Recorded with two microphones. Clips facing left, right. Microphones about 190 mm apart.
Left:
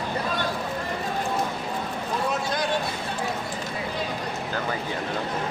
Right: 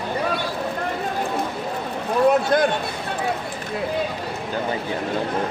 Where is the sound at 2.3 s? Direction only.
55° right (ahead or behind).